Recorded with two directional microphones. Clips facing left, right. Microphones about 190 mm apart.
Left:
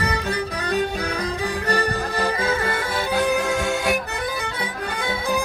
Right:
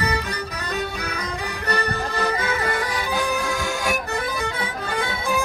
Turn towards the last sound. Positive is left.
turn(degrees=20)  # may be behind; listen again after turning